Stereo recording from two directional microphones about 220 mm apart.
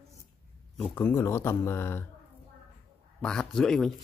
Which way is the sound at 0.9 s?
10° left (ahead or behind).